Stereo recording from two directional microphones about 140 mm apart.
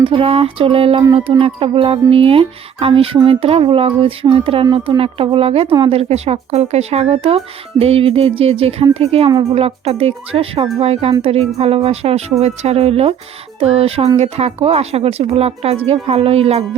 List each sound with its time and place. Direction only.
0.0 s speech: 40° right (ahead or behind)
1.0 s speech: 30° right (ahead or behind)
1.4 s speech: 40° right (ahead or behind)